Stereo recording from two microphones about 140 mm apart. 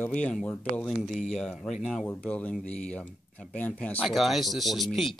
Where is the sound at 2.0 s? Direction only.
10° left (ahead or behind).